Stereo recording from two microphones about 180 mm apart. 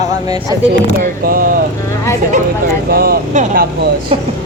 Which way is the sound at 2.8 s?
60° right (ahead or behind).